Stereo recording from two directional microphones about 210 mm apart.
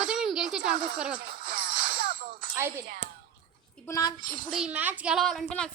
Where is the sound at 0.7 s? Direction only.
35° right (ahead or behind).